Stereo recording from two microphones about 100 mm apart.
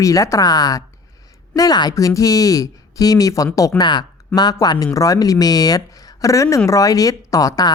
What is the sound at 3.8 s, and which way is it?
Speech, 45° left (ahead or behind).